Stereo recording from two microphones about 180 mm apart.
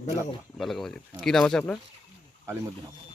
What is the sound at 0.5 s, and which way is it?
Speech, centre (ahead or behind).